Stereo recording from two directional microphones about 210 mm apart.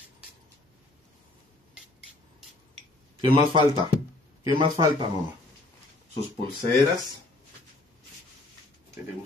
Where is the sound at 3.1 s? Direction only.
25° right (ahead or behind).